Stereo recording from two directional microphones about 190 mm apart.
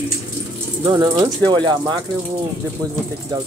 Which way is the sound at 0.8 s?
25° right (ahead or behind).